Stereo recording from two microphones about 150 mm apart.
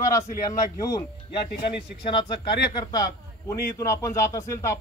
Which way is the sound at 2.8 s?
25° left (ahead or behind).